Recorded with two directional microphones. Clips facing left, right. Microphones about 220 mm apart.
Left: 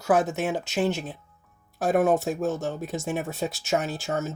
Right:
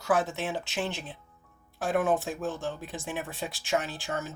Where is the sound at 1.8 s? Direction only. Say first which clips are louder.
Left 5 dB; 40° left (ahead or behind).